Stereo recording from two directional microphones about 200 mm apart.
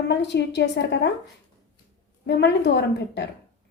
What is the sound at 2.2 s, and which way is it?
A woman's voice, 60° left (ahead or behind).